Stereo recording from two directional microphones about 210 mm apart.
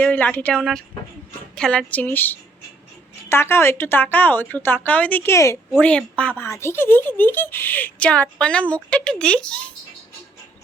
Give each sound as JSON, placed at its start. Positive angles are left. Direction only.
{"t": 0.0, "sound": "speech", "side_deg": 5}